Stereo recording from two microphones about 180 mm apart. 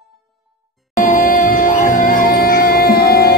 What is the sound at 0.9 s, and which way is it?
Music, 50° left (ahead or behind).